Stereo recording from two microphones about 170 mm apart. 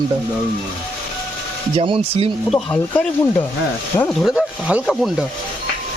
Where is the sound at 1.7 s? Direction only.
35° right (ahead or behind).